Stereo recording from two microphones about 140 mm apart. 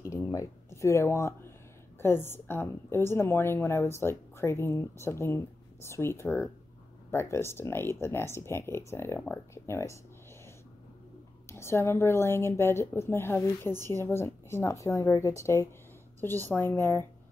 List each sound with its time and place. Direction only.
0.1 s a sound: 20° left (ahead or behind)
2.0 s a woman's voice: 15° left (ahead or behind)
11.4 s a woman's voice: 20° left (ahead or behind)